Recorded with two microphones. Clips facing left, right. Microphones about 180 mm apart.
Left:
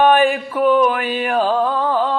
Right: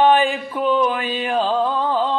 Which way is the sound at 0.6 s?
55° left (ahead or behind).